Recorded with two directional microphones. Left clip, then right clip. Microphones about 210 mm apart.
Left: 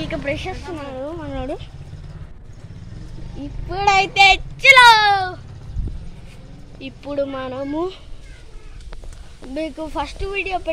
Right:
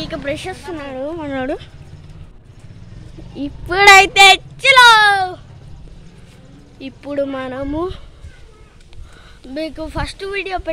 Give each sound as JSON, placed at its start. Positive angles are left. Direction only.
{"t": 0.2, "sound": "speech", "side_deg": -25}
{"t": 3.3, "sound": "speech", "side_deg": -45}
{"t": 6.8, "sound": "speech", "side_deg": -25}
{"t": 9.5, "sound": "speech", "side_deg": -10}